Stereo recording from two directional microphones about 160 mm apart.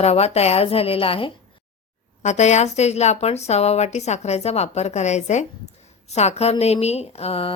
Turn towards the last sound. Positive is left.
turn(degrees=35)  # may be behind; listen again after turning